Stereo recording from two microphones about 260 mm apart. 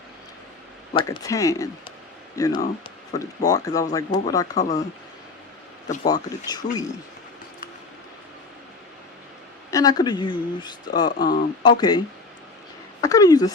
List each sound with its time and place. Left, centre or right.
0.9 s speech: centre
6.1 s speech: centre
9.7 s speech: centre